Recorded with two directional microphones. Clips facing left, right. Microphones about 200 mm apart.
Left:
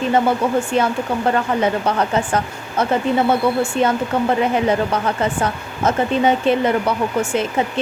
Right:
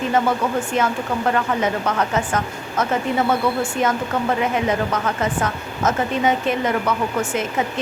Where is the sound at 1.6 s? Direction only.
30° left (ahead or behind).